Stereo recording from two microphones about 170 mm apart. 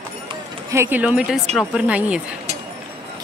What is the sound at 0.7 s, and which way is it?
Speech, 15° right (ahead or behind).